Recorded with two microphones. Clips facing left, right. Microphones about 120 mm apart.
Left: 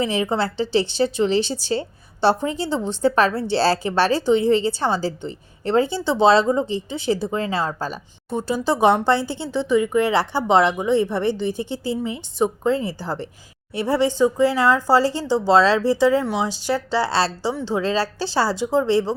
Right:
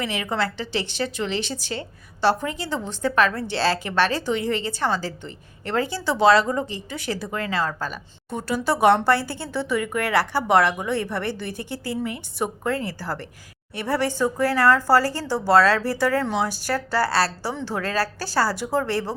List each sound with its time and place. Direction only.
0.0 s a woman's voice: 30° left (ahead or behind)